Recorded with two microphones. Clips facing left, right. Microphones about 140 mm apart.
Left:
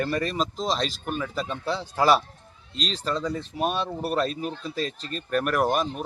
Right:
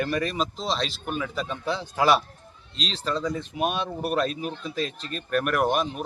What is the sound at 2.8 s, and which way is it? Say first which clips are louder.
Speech: left 2 dB; 45° left (ahead or behind).